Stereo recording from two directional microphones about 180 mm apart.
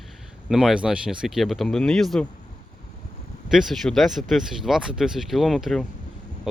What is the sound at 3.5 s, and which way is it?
Speech, centre (ahead or behind).